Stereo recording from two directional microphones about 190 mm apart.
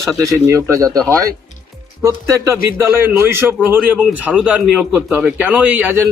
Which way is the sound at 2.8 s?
10° right (ahead or behind).